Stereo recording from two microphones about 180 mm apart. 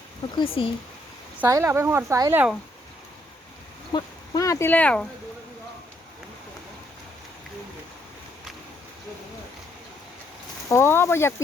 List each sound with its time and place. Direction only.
0.3 s speech: 30° left (ahead or behind)
1.4 s a woman's voice: 15° right (ahead or behind)
3.9 s speech: 20° left (ahead or behind)
10.7 s speech: 15° left (ahead or behind)